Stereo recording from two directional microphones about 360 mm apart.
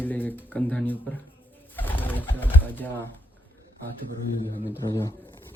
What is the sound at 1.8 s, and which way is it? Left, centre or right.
Bird, centre.